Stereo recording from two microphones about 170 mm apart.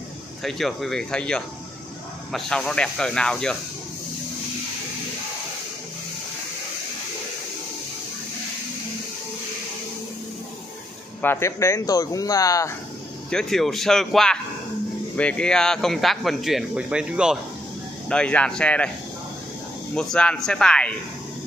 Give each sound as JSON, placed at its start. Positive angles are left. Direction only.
{"t": 0.4, "sound": "speech", "side_deg": 0}
{"t": 11.1, "sound": "speech", "side_deg": 15}
{"t": 13.3, "sound": "speech", "side_deg": 5}
{"t": 18.0, "sound": "speech", "side_deg": 5}
{"t": 19.9, "sound": "speech", "side_deg": 5}